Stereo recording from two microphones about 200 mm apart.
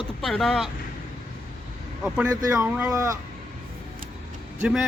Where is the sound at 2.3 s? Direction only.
20° right (ahead or behind).